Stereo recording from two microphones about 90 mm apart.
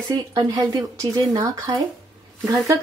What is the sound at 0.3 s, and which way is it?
Speech, 40° right (ahead or behind).